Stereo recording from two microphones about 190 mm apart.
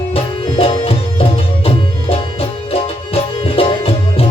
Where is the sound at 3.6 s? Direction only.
30° left (ahead or behind).